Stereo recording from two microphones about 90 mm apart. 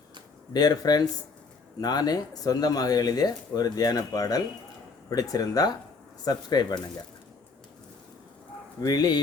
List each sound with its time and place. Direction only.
0.5 s speech: 45° left (ahead or behind)
8.8 s speech: 45° left (ahead or behind)